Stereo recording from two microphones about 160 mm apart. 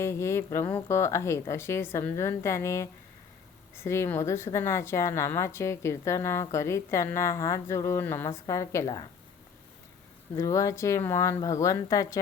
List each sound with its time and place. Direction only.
0.0 s a woman's voice: 15° left (ahead or behind)
10.3 s speech: 20° left (ahead or behind)